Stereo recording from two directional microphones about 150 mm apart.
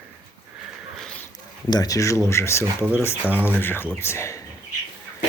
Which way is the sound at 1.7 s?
25° left (ahead or behind).